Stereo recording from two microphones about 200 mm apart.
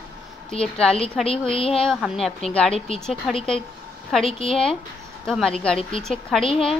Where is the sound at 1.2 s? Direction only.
Centre (ahead or behind).